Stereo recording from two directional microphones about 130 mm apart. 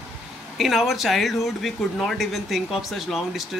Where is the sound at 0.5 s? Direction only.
Centre (ahead or behind).